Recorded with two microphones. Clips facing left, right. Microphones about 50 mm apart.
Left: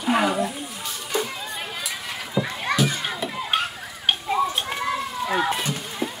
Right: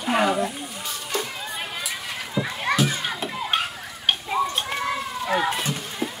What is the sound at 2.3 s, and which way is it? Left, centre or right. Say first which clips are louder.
Children playing: even; centre.